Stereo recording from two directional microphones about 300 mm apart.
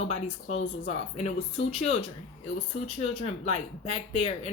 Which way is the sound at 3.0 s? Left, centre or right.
Left.